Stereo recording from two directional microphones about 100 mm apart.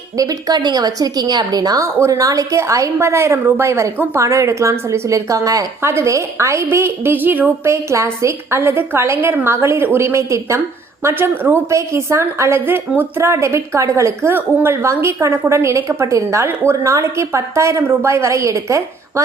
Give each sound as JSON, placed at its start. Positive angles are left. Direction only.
{"t": 0.2, "sound": "a woman's voice", "side_deg": -35}